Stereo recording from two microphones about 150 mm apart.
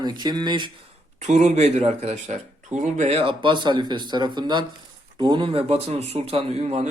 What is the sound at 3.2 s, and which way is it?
Speech, 35° right (ahead or behind).